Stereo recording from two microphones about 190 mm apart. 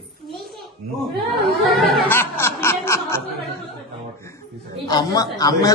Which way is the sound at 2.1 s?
10° left (ahead or behind).